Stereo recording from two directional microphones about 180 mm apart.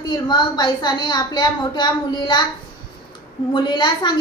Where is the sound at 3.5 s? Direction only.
25° left (ahead or behind).